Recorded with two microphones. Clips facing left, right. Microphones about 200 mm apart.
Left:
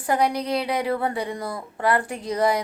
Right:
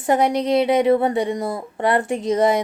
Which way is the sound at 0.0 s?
25° right (ahead or behind).